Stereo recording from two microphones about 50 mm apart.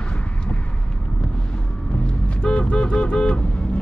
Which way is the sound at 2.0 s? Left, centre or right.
Left.